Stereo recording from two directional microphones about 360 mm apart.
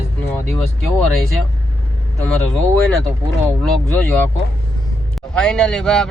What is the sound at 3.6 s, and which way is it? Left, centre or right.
A man's voice, centre.